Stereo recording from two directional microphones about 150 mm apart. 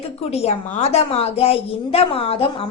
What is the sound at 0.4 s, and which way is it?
A woman's voice, 45° left (ahead or behind).